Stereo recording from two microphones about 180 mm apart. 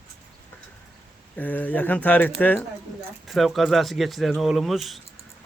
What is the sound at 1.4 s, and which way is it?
Speech, 10° left (ahead or behind).